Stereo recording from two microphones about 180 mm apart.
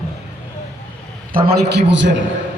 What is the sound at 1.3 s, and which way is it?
Speech, 60° right (ahead or behind).